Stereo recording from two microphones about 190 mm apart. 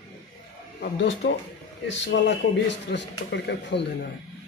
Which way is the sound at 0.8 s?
60° left (ahead or behind).